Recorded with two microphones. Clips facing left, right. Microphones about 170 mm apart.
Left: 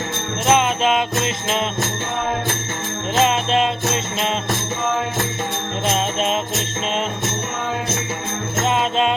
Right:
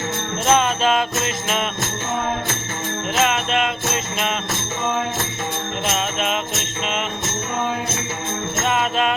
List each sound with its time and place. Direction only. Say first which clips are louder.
0.4 s jingle bell: left 1 dB; 20° left (ahead or behind)
3.2 s jingle bell: left 3 dB; 30° left (ahead or behind)
8.6 s music: left 2 dB; 25° left (ahead or behind)